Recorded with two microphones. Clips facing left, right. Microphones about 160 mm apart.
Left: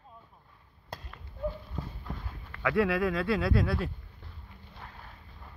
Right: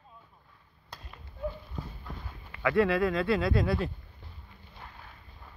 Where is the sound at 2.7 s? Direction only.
10° left (ahead or behind).